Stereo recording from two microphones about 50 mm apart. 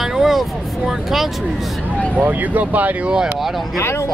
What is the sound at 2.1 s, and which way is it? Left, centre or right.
Speech, right.